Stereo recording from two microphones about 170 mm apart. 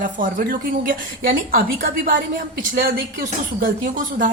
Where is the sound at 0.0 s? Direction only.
55° right (ahead or behind).